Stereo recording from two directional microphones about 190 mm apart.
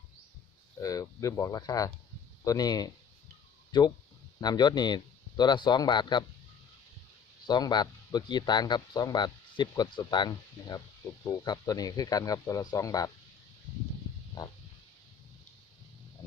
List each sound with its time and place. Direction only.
0.8 s speech: 20° left (ahead or behind)
7.4 s speech: 20° left (ahead or behind)
14.4 s speech: 20° left (ahead or behind)